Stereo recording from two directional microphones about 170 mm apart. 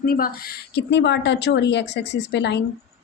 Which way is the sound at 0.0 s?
60° left (ahead or behind).